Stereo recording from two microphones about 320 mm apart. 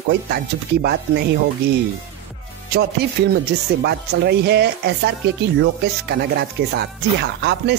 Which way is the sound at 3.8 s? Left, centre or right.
Right.